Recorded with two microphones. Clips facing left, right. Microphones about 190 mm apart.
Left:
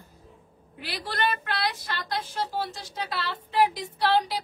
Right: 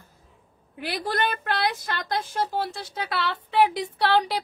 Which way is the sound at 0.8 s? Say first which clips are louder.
Right 3 dB; 50° right (ahead or behind).